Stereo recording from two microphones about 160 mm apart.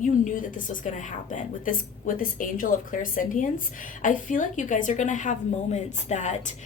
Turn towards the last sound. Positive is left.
turn(degrees=45)  # may be behind; listen again after turning